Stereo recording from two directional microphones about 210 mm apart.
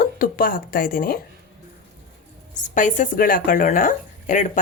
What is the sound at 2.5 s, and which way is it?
Speech, 35° left (ahead or behind).